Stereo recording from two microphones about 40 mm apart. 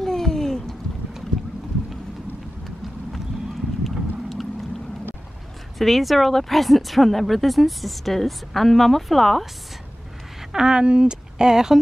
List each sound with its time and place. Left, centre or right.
0.0 s a sound: centre
3.9 s vehicle: centre
5.8 s speech: centre
10.5 s speech: centre